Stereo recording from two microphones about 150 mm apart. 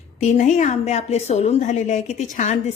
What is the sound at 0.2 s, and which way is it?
A woman's voice, 50° left (ahead or behind).